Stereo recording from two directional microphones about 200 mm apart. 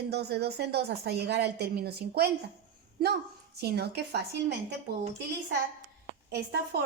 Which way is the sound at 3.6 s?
55° right (ahead or behind).